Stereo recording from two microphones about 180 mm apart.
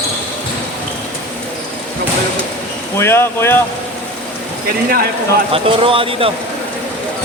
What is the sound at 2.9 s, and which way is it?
Speech, 15° left (ahead or behind).